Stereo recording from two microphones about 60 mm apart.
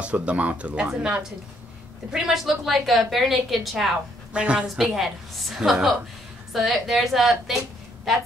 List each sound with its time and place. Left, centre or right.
0.0 s a woman's voice: right; by 3.9 s centre
4.3 s speech: centre
4.9 s a woman's voice: centre